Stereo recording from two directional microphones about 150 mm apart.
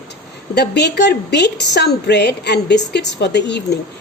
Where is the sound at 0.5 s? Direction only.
90° left.